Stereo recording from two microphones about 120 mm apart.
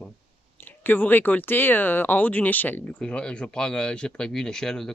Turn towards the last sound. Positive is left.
turn(degrees=5)  # may be behind; listen again after turning